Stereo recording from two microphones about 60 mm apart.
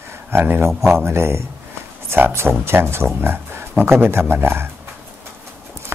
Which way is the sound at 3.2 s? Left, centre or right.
Right.